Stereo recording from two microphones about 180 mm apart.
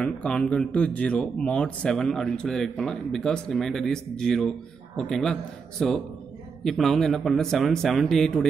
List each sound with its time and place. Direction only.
0.0 s speech: 5° left (ahead or behind)